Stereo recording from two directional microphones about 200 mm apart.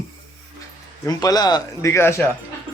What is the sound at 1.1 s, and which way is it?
Speech, 20° left (ahead or behind).